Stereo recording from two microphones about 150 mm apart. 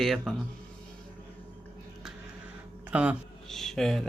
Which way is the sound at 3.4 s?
Centre (ahead or behind).